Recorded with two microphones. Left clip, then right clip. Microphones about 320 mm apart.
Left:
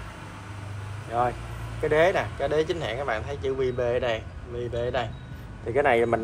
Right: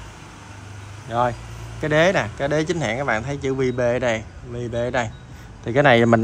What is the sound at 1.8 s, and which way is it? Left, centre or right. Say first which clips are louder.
Speech: right 4 dB; right.